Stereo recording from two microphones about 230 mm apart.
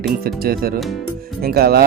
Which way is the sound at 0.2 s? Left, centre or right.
Right.